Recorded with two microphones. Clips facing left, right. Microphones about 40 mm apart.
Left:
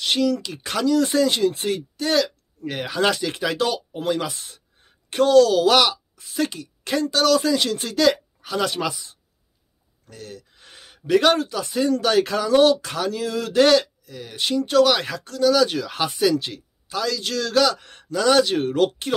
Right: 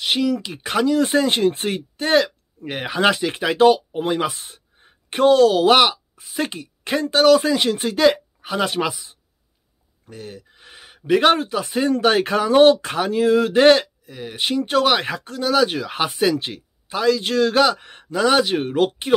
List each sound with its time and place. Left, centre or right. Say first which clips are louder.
0.0 s speech: right 1 dB; centre